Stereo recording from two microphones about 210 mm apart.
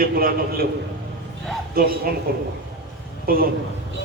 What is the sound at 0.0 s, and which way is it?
Speech, 45° right (ahead or behind).